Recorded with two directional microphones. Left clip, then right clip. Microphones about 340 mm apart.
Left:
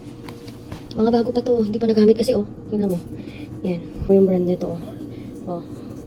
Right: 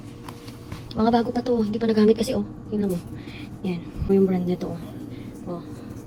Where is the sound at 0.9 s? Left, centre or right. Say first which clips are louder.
Left 3 dB; centre.